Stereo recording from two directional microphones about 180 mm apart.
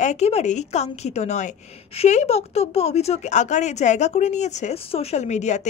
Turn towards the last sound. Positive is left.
turn(degrees=40)  # may be behind; listen again after turning